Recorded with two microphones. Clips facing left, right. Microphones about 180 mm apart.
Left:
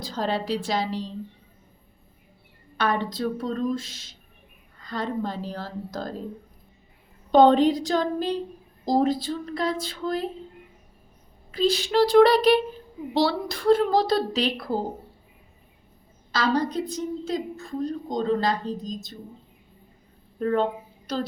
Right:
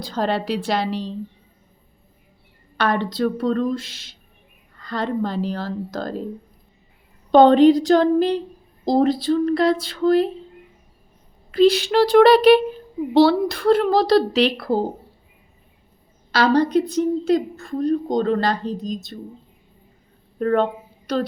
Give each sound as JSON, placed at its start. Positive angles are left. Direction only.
{"t": 0.0, "sound": "a woman's voice", "side_deg": -65}
{"t": 2.7, "sound": "a woman's voice", "side_deg": -75}
{"t": 7.3, "sound": "a woman's voice", "side_deg": -75}
{"t": 11.5, "sound": "a woman's voice", "side_deg": -65}
{"t": 16.3, "sound": "a woman's voice", "side_deg": -70}
{"t": 20.4, "sound": "a woman's voice", "side_deg": -65}